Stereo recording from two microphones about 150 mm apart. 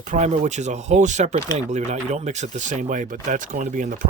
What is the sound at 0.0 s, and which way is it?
Speech, 55° right (ahead or behind).